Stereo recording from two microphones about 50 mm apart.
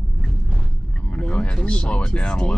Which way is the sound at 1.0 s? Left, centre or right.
Left.